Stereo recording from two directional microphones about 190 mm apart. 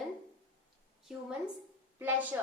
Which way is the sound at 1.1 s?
5° right (ahead or behind).